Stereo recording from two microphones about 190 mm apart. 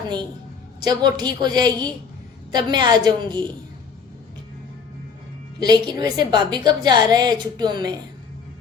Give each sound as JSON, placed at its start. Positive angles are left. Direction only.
{"t": 0.9, "sound": "a woman's voice", "side_deg": -20}
{"t": 5.5, "sound": "a woman's voice", "side_deg": -20}